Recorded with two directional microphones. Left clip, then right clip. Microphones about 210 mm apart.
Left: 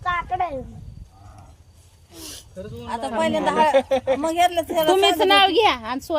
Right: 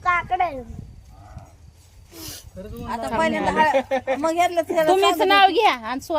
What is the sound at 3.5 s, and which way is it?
Speech, 55° left (ahead or behind).